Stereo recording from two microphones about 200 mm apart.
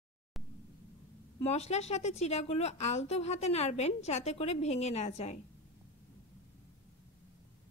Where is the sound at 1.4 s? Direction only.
30° left (ahead or behind).